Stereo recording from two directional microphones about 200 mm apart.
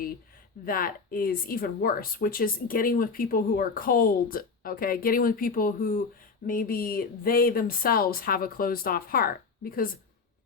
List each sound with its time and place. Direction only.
0.6 s speech: 45° left (ahead or behind)